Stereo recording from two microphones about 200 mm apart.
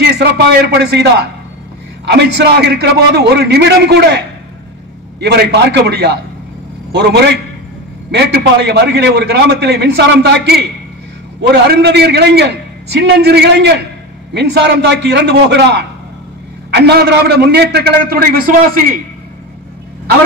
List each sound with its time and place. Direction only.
0.0 s a man's voice: 55° right (ahead or behind)
2.0 s a man's voice: 55° right (ahead or behind)
5.2 s a man's voice: 55° right (ahead or behind)